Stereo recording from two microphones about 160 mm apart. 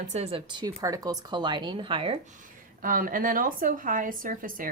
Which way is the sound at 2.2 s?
55° right (ahead or behind).